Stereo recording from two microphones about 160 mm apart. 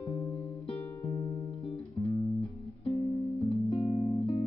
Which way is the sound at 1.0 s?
30° left (ahead or behind).